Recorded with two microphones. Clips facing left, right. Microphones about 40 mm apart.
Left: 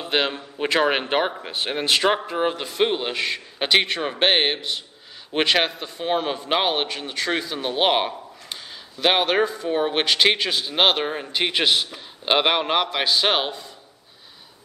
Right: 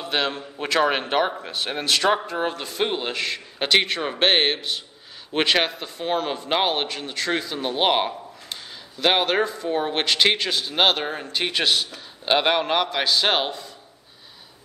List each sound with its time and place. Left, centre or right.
0.0 s a man's voice: centre